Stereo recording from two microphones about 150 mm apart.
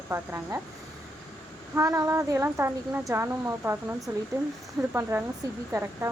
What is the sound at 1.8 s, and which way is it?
A woman's voice, 20° right (ahead or behind).